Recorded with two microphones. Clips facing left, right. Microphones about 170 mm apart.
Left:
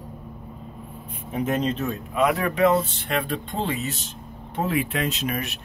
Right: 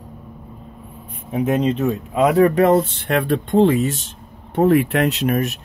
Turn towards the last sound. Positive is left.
turn(degrees=-65)  # may be behind; listen again after turning